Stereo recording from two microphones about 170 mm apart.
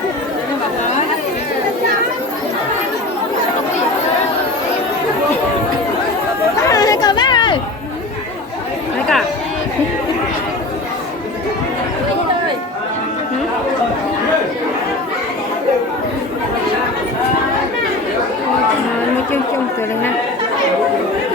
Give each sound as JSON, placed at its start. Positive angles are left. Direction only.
{"t": 6.7, "sound": "chatter", "side_deg": 20}